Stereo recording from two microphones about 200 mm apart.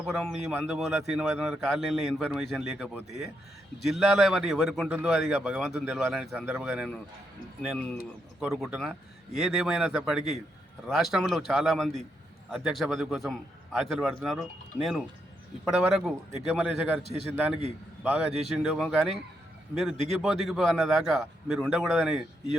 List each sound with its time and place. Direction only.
0.0 s a man's voice: centre (ahead or behind)
17.0 s a man's voice: 30° right (ahead or behind)
17.3 s a man's voice: 5° right (ahead or behind)